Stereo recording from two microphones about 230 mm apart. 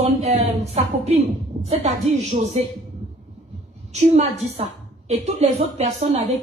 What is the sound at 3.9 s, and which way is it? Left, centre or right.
A woman's voice, right.